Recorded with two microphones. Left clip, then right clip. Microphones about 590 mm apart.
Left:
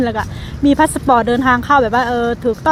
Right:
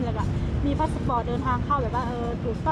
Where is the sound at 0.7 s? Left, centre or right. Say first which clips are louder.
Left 14 dB; left.